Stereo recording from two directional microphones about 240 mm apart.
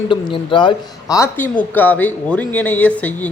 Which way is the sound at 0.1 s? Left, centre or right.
Left.